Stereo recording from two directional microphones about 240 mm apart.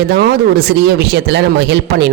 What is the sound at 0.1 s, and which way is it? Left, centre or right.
Speech, right.